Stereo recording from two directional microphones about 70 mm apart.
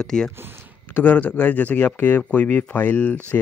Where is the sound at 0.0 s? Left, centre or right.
Centre.